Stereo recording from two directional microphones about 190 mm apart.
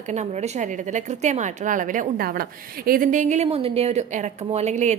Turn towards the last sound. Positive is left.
turn(degrees=-35)  # may be behind; listen again after turning